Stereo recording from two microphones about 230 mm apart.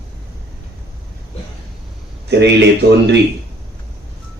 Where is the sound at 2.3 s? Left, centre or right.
Right.